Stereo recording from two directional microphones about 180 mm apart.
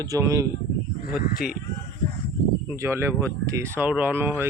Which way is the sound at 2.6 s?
15° right (ahead or behind).